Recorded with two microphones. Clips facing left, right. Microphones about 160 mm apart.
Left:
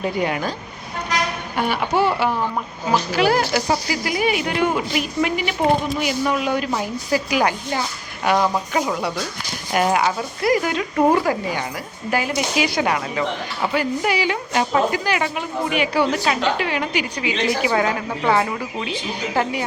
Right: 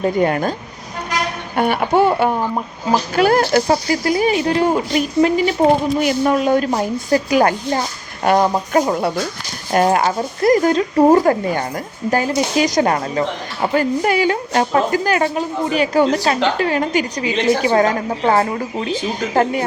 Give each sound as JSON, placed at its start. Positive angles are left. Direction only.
{"t": 0.0, "sound": "speech", "side_deg": -45}
{"t": 1.5, "sound": "speech", "side_deg": -50}
{"t": 6.0, "sound": "speech", "side_deg": -45}